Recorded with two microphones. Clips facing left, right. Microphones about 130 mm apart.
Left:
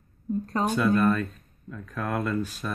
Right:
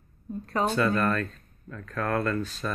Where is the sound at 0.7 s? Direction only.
10° left (ahead or behind).